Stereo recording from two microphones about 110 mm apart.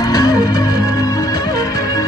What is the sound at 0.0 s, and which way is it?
Music, 35° left (ahead or behind).